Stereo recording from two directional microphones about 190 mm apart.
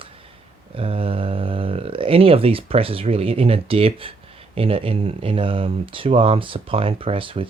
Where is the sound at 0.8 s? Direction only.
30° right (ahead or behind).